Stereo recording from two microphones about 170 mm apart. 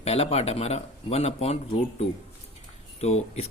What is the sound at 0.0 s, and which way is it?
Speech, 35° left (ahead or behind).